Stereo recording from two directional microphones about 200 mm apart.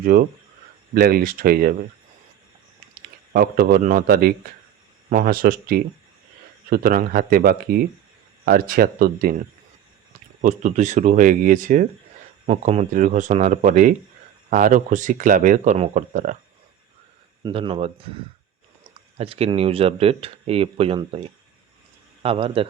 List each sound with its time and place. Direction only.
0.0 s speech: 45° right (ahead or behind)
3.3 s speech: 45° right (ahead or behind)
10.4 s speech: 40° right (ahead or behind)
17.4 s speech: 25° right (ahead or behind)